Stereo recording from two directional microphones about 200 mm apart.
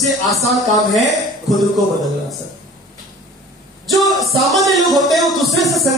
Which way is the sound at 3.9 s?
Centre (ahead or behind).